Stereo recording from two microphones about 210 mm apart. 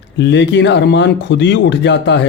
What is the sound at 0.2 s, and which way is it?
Speech, 60° left (ahead or behind).